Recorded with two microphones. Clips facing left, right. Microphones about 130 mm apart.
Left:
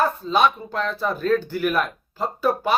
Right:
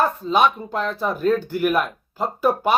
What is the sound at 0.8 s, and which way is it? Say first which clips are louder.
Speech: right 1 dB; 15° right (ahead or behind).